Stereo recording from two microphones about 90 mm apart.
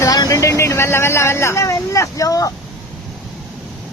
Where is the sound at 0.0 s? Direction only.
40° left (ahead or behind).